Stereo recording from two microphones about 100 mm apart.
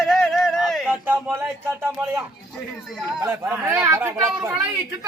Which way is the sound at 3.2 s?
25° right (ahead or behind).